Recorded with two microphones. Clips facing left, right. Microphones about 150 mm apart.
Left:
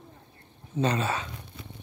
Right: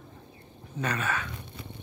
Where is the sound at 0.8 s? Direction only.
25° left (ahead or behind).